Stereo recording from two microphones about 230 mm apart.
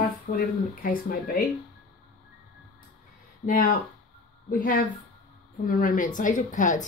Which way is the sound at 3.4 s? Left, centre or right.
Left.